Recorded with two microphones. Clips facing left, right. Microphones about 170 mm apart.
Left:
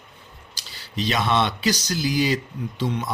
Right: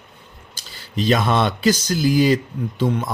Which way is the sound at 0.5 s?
50° right (ahead or behind).